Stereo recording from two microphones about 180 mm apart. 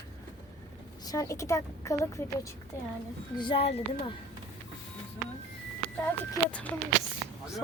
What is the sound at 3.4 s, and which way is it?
Speech, 30° left (ahead or behind).